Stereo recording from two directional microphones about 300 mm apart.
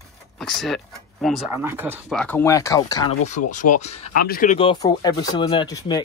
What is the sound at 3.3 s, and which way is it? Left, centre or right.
Speech, left.